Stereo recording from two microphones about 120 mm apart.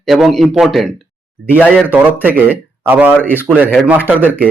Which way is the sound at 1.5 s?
10° right (ahead or behind).